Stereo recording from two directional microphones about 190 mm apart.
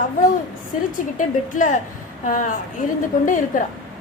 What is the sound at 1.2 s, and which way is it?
A woman's voice, 45° left (ahead or behind).